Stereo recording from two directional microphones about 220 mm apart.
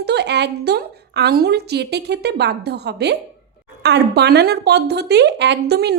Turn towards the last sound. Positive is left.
turn(degrees=-50)  # may be behind; listen again after turning